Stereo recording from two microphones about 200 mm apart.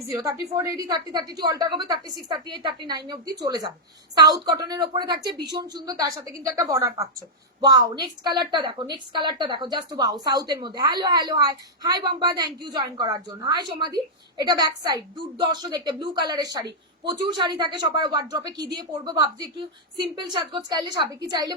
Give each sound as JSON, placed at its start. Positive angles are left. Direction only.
{"t": 0.1, "sound": "a woman's voice", "side_deg": -15}